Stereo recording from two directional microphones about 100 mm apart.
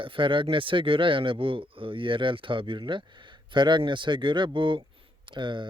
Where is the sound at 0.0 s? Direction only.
60° right (ahead or behind).